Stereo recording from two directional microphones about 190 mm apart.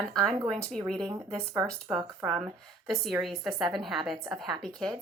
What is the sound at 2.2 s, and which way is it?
Speech, 5° right (ahead or behind).